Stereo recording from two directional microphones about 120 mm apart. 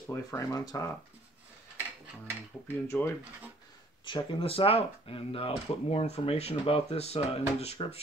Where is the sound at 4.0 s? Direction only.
40° left (ahead or behind); by 8.0 s 60° left (ahead or behind).